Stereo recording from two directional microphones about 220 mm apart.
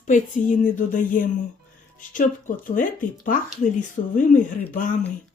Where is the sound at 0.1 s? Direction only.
35° left (ahead or behind).